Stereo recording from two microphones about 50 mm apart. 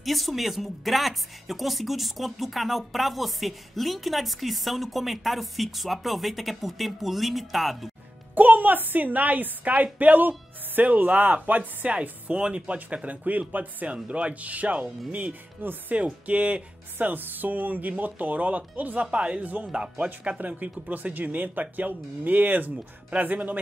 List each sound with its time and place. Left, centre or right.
0.0 s speech: centre
8.4 s speech: right
17.1 s speech: right
19.7 s speech: centre
20.2 s speech: right